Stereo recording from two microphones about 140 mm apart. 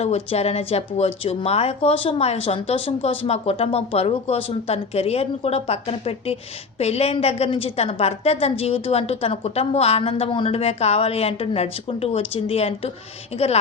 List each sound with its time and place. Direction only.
0.0 s speech: 50° left (ahead or behind)